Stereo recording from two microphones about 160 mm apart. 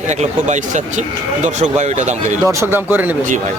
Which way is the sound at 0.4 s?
50° right (ahead or behind).